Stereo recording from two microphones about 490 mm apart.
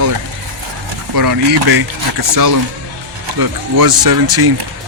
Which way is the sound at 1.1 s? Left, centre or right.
Right.